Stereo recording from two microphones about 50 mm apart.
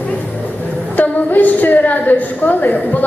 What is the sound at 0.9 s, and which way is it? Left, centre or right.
A woman's voice, left.